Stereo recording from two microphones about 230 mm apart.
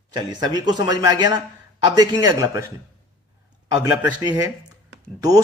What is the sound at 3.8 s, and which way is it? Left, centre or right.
Speech, centre.